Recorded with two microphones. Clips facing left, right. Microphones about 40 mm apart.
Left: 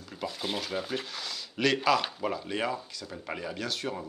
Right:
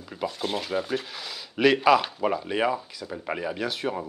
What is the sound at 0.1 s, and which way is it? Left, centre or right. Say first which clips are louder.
Speech: right 5 dB; centre.